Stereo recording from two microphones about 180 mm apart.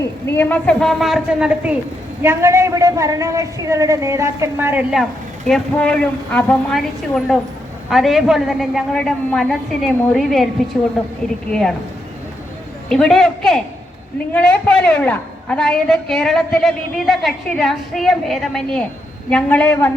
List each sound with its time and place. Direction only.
0.0 s a woman's voice: 15° left (ahead or behind)
12.9 s a woman's voice: centre (ahead or behind)